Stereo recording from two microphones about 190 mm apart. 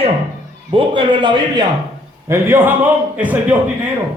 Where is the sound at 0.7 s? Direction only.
25° right (ahead or behind).